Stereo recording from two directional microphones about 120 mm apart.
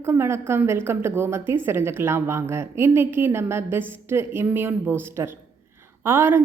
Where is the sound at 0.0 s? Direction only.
20° right (ahead or behind).